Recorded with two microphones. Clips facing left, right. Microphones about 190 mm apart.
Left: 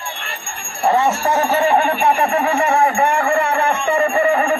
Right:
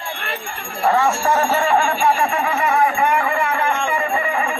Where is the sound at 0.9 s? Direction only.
20° left (ahead or behind).